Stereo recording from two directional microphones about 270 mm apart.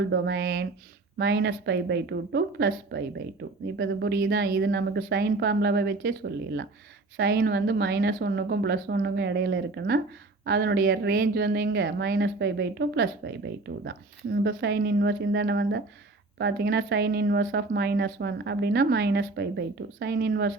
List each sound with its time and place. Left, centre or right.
0.1 s speech: right